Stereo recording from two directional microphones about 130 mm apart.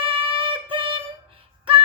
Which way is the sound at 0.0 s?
45° right (ahead or behind).